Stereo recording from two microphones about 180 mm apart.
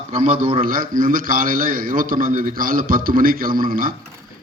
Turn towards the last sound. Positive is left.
turn(degrees=-50)  # may be behind; listen again after turning